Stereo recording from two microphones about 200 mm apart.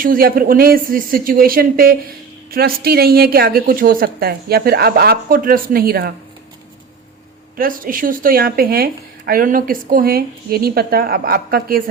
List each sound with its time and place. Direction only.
0.0 s speech: 45° right (ahead or behind)
7.5 s speech: 45° right (ahead or behind)